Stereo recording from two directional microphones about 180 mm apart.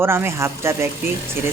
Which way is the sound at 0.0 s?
15° right (ahead or behind).